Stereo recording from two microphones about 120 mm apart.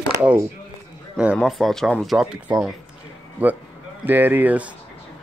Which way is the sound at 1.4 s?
Centre (ahead or behind).